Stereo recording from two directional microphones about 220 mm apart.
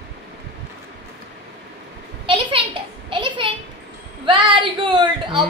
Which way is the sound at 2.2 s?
25° right (ahead or behind).